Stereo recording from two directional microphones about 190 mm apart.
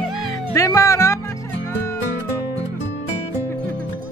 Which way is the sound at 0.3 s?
15° left (ahead or behind).